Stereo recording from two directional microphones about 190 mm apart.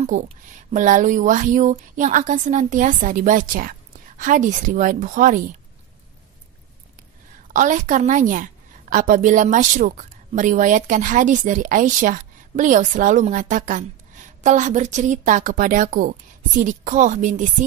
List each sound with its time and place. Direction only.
0.7 s a woman's voice: 40° right (ahead or behind)
7.5 s a woman's voice: 40° right (ahead or behind)